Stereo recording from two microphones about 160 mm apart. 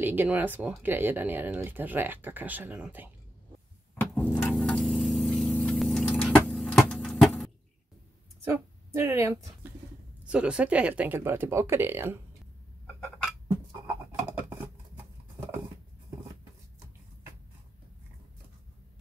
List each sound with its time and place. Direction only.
0.0 s speech: 10° right (ahead or behind)
4.0 s music: 10° left (ahead or behind)
4.3 s a sound: centre (ahead or behind)
8.5 s a woman's voice: 15° right (ahead or behind)